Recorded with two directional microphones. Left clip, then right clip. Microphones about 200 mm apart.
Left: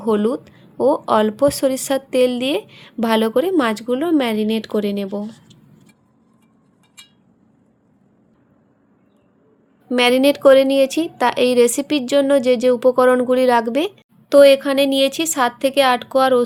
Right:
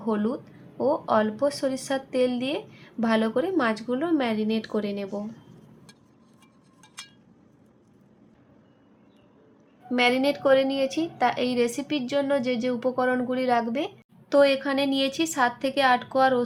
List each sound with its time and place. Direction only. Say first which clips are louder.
0.0 s speech: left 10 dB; 45° left (ahead or behind)
9.9 s speech: left 8 dB; 55° left (ahead or behind)